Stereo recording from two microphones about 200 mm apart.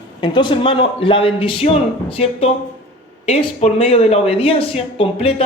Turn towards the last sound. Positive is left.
turn(degrees=30)  # may be behind; listen again after turning